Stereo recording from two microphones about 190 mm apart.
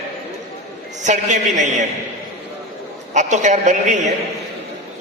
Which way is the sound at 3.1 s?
40° right (ahead or behind).